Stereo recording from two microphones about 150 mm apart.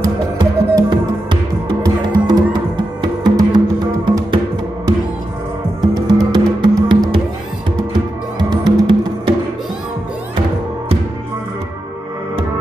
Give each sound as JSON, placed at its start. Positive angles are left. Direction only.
{"t": 0.0, "sound": "music", "side_deg": -30}
{"t": 5.8, "sound": "music", "side_deg": -30}